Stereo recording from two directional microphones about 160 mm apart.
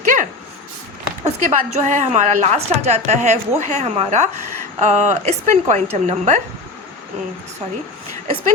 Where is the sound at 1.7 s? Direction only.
50° right (ahead or behind).